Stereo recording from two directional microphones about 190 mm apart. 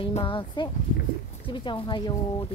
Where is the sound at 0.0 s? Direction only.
25° left (ahead or behind).